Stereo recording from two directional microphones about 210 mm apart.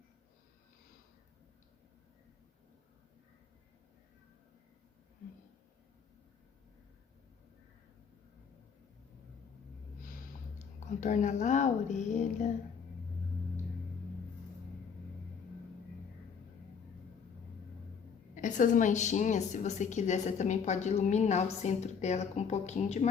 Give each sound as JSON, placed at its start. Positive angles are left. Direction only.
{"t": 10.8, "sound": "a woman's voice", "side_deg": 35}
{"t": 18.3, "sound": "a woman's voice", "side_deg": 35}